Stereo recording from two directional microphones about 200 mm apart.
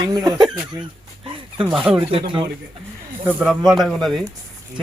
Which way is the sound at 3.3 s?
10° right (ahead or behind).